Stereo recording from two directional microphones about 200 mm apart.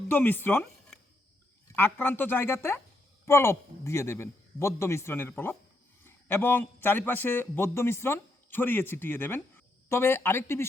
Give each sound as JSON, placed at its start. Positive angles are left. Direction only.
{"t": 0.1, "sound": "speech", "side_deg": 10}